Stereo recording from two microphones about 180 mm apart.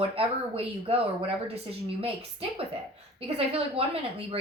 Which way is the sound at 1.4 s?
30° right (ahead or behind).